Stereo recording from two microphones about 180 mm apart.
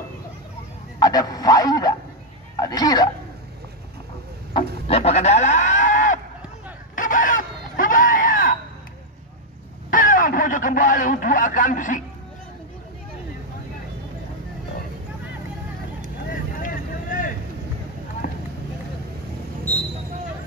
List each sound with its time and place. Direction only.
0.9 s speech: 20° left (ahead or behind)
4.6 s livestock: 35° left (ahead or behind)
7.0 s chicken: 45° left (ahead or behind)
9.8 s speech: 50° left (ahead or behind)
16.5 s vehicle: 50° left (ahead or behind)